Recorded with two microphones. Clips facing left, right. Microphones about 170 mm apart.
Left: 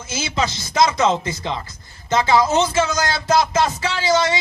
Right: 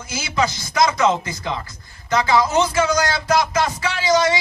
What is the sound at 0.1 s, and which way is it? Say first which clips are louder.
Speech: right 1 dB; 25° left (ahead or behind).